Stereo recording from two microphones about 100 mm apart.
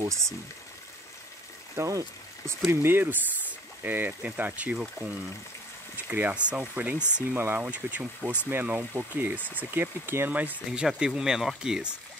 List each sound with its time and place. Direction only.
1.8 s speech: 30° right (ahead or behind); by 12.0 s 10° right (ahead or behind)